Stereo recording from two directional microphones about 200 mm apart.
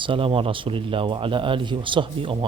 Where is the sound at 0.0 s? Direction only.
25° right (ahead or behind).